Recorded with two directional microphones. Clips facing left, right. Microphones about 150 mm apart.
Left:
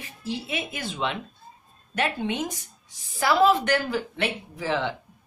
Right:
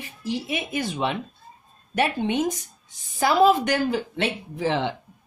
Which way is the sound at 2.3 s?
20° right (ahead or behind).